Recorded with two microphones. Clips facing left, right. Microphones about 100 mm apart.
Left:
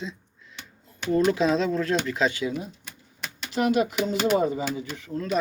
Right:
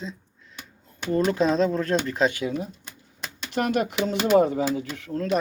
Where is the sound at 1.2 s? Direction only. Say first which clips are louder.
Right 2 dB; 45° right (ahead or behind).